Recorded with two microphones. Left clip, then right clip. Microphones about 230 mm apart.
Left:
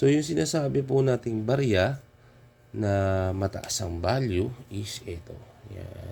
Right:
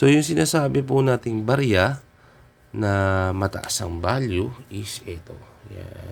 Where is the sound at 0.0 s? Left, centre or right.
Centre.